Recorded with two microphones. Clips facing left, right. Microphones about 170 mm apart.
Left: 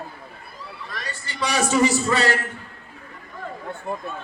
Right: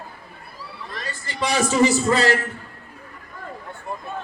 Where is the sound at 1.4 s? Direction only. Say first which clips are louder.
Right 1 dB; 35° right (ahead or behind).